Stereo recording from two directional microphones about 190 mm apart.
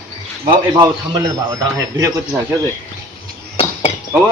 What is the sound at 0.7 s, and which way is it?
Speech, 20° right (ahead or behind).